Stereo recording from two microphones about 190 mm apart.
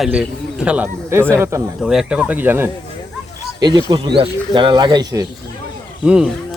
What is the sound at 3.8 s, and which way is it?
Speech, 25° right (ahead or behind).